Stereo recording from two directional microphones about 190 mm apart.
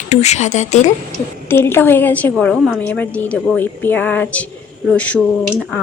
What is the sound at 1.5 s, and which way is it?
A woman's voice, 10° left (ahead or behind).